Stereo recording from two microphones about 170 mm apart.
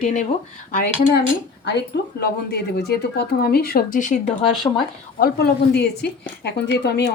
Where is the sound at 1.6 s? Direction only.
70° left (ahead or behind); by 4.2 s 50° left (ahead or behind).